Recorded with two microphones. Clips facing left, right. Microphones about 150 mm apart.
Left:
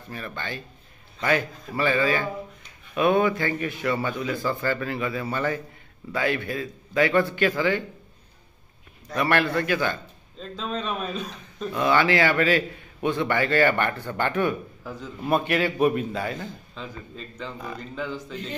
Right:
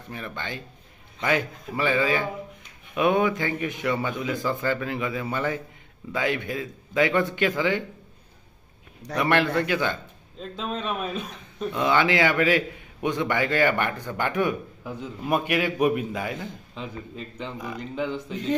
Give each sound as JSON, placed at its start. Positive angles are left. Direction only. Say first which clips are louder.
{"t": 0.1, "sound": "a man's voice", "louder": "even", "side_deg": -20}
{"t": 9.1, "sound": "a man's voice", "louder": "right 1 dB", "side_deg": -20}